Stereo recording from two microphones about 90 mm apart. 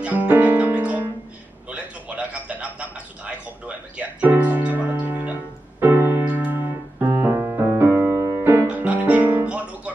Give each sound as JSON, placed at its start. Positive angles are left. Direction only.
{"t": 0.0, "sound": "music", "side_deg": -15}
{"t": 1.7, "sound": "a sound", "side_deg": -15}
{"t": 5.8, "sound": "music", "side_deg": -25}